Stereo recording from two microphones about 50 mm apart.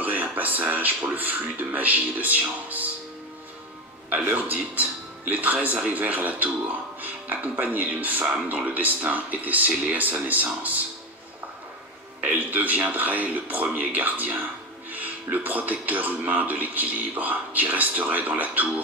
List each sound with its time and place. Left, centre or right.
0.0 s speech: right
4.3 s a man's voice: right
12.2 s a man's voice: right